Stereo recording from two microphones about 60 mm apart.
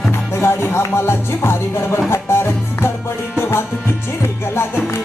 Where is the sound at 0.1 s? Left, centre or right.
Left.